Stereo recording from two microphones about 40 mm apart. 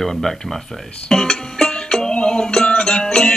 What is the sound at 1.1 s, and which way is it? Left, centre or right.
Music, centre.